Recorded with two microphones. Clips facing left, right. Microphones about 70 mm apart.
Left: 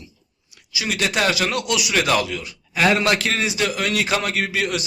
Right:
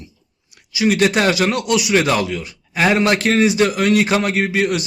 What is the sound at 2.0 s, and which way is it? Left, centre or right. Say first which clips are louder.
A man's voice: right 2 dB; right.